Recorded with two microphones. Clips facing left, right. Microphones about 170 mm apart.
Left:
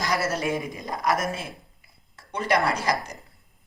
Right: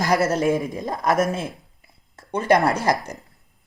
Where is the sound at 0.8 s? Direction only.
50° right (ahead or behind).